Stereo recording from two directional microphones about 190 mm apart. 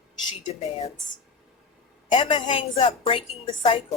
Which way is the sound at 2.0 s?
30° left (ahead or behind).